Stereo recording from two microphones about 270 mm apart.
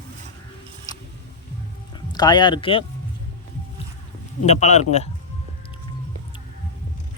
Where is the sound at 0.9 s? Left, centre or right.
Centre.